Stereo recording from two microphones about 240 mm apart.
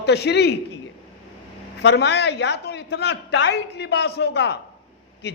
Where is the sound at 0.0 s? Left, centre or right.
Left.